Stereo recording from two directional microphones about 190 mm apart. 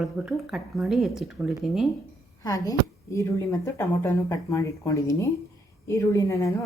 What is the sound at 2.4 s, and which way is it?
Speech, 20° left (ahead or behind).